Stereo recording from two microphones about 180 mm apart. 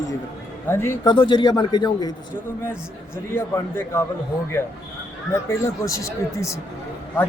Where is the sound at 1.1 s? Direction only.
25° left (ahead or behind).